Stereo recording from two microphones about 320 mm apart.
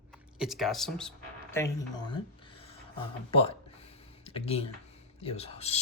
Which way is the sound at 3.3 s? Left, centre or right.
Centre.